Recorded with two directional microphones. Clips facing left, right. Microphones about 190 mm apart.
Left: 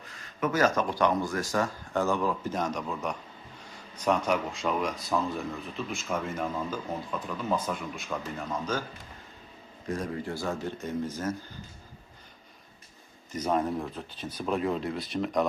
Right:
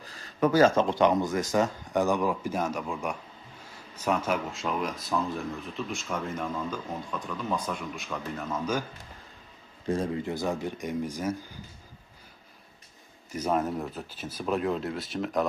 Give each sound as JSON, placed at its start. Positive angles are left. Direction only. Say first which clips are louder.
{"t": 0.0, "sound": "speech", "louder": "right 5 dB", "side_deg": -35}
{"t": 9.8, "sound": "speech", "louder": "right 4 dB", "side_deg": -25}
{"t": 13.3, "sound": "speech", "louder": "even", "side_deg": -10}